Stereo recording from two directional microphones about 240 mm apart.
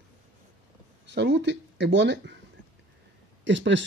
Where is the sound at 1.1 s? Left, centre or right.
Right.